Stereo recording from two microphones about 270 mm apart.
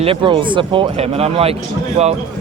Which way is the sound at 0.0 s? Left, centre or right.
Centre.